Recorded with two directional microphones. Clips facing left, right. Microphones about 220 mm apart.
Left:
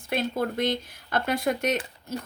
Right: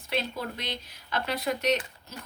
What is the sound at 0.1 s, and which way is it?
A woman's voice, 50° left (ahead or behind).